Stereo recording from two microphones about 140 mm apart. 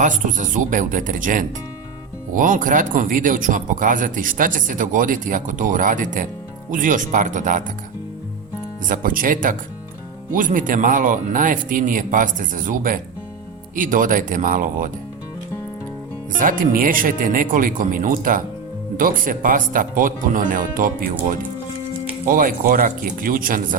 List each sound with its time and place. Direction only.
0.0 s speech: 65° right (ahead or behind)
8.9 s speech: 80° right
16.4 s speech: 75° right (ahead or behind)